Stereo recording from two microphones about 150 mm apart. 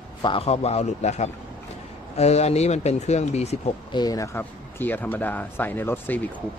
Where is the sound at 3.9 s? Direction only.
25° left (ahead or behind).